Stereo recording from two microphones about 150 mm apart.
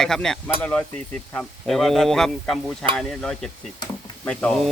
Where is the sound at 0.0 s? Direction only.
5° left (ahead or behind).